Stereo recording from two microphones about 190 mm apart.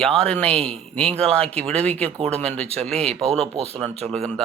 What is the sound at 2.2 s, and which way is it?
Speech, 35° right (ahead or behind).